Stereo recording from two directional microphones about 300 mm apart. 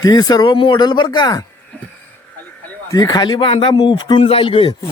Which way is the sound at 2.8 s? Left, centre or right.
Centre.